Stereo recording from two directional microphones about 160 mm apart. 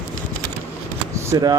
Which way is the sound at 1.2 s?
20° right (ahead or behind).